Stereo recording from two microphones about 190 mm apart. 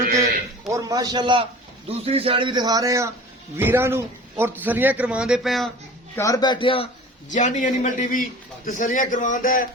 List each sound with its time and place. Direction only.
0.7 s a man's voice: 15° right (ahead or behind); by 5.7 s centre (ahead or behind)
6.1 s a man's voice: 15° left (ahead or behind)
7.3 s a man's voice: 40° left (ahead or behind)